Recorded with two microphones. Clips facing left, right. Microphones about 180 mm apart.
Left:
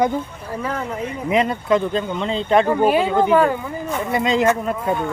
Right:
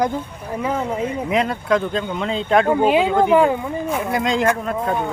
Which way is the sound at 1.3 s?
Centre (ahead or behind).